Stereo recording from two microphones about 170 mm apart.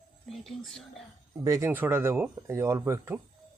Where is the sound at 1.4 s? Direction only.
15° right (ahead or behind).